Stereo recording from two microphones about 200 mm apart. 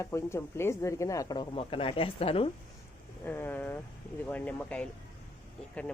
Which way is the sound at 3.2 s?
10° left (ahead or behind).